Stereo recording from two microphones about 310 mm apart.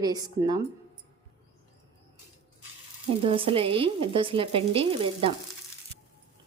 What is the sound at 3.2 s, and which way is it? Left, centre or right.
A woman's voice, centre.